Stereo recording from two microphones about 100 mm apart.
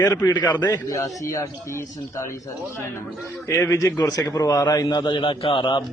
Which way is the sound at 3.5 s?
25° left (ahead or behind).